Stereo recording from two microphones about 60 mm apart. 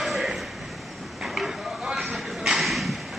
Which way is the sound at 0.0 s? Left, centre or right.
Centre.